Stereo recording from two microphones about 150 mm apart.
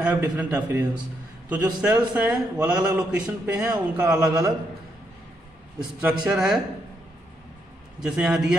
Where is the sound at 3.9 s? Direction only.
15° right (ahead or behind).